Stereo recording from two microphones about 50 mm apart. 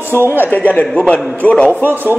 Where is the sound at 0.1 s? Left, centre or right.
Right.